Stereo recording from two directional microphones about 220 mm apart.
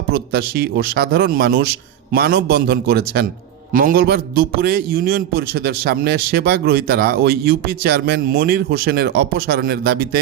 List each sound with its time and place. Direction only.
0.1 s a man's voice: 45° right (ahead or behind)